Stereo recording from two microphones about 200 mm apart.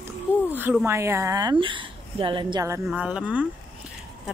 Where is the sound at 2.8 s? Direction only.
5° right (ahead or behind).